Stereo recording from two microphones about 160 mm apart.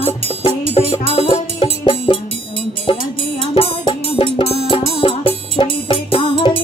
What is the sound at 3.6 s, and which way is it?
Music, 30° left (ahead or behind).